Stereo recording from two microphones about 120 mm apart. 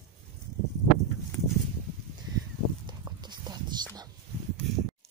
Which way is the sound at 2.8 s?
35° right (ahead or behind).